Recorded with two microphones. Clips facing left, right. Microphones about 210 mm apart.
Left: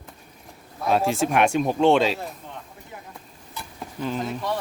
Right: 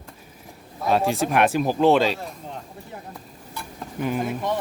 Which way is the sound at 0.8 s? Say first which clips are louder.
Even; centre (ahead or behind).